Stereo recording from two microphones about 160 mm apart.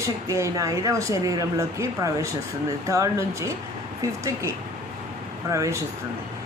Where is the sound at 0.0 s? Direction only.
20° right (ahead or behind).